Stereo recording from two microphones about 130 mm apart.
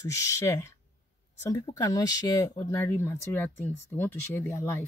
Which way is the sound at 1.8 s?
30° left (ahead or behind).